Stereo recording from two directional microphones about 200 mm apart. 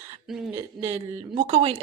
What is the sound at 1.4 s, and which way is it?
Speech, 30° right (ahead or behind).